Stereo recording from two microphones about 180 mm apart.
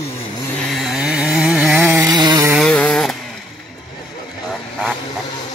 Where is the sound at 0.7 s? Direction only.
Centre (ahead or behind).